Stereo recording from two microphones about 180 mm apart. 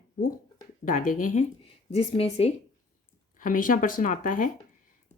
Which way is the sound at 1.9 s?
35° left (ahead or behind).